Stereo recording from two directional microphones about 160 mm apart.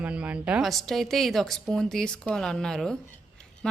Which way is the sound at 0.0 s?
5° right (ahead or behind).